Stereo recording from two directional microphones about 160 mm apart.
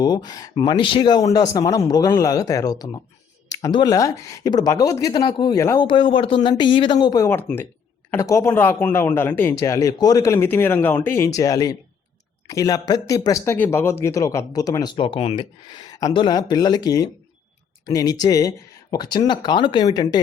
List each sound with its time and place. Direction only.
0.0 s speech: 25° left (ahead or behind)